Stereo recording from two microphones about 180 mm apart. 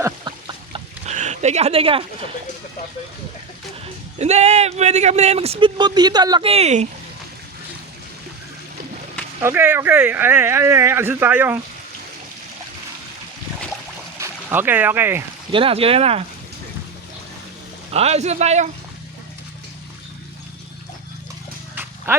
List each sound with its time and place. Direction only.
0.0 s a sound: 25° right (ahead or behind)
1.0 s speech: 40° right (ahead or behind)
4.2 s speech: 35° right (ahead or behind)
9.4 s speech: 10° right (ahead or behind)
14.2 s speech: 10° right (ahead or behind)
15.5 s speech: 30° right (ahead or behind)
17.9 s speech: 35° right (ahead or behind)
21.8 s a sound: 10° right (ahead or behind)